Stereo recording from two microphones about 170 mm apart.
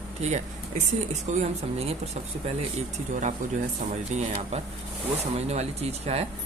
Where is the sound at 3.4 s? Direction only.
50° right (ahead or behind).